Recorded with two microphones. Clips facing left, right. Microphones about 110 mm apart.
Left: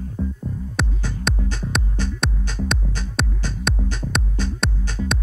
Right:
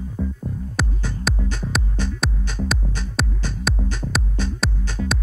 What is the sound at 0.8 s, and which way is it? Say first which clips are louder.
Music: even; centre (ahead or behind).